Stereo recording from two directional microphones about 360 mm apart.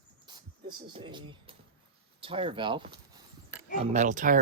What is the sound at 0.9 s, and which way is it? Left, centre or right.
Speech, centre.